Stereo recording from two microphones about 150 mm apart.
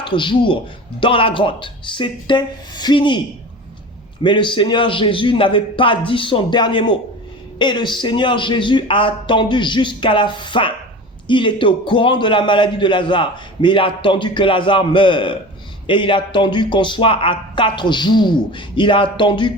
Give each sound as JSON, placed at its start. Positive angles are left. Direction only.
{"t": 0.0, "sound": "a man's voice", "side_deg": 30}
{"t": 4.2, "sound": "a man's voice", "side_deg": 30}